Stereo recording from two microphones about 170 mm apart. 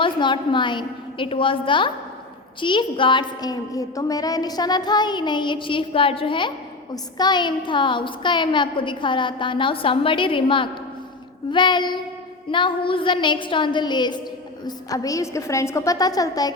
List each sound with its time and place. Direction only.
0.0 s a woman's voice: 25° left (ahead or behind)